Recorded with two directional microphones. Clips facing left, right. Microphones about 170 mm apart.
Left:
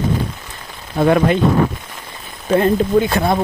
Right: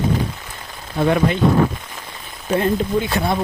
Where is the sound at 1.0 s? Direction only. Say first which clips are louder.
Left 4 dB; 55° left (ahead or behind).